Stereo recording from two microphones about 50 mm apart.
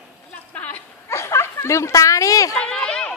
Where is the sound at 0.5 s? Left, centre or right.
Left.